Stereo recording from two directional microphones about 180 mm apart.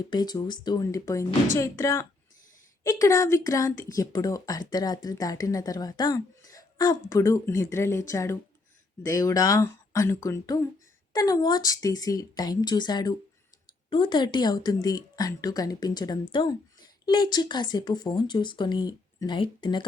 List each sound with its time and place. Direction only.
0.1 s speech: 20° left (ahead or behind)